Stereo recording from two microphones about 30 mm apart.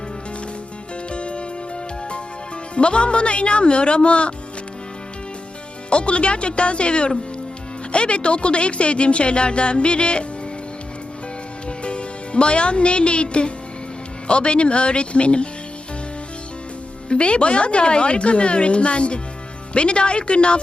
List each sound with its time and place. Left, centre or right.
1.1 s music: left
2.7 s a woman's voice: left
5.9 s a woman's voice: left
11.8 s a woman's voice: left
17.1 s a woman's voice: left